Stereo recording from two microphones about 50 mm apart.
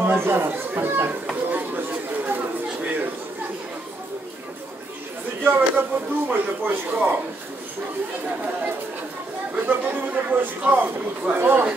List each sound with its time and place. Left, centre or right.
0.0 s speech: right
1.5 s a sound: right
5.4 s speech: right
9.7 s speech: right